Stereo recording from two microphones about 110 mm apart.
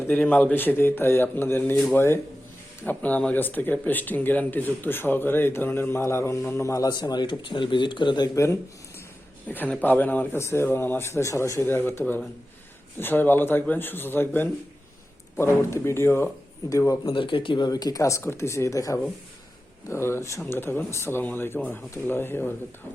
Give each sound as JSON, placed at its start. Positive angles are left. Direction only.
{"t": 0.1, "sound": "speech", "side_deg": 15}
{"t": 9.5, "sound": "speech", "side_deg": 15}
{"t": 17.1, "sound": "speech", "side_deg": 50}